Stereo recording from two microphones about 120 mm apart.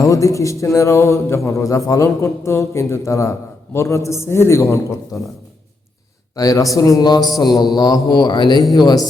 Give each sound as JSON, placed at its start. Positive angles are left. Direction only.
{"t": 0.1, "sound": "a man's voice", "side_deg": 25}
{"t": 6.3, "sound": "a man's voice", "side_deg": 30}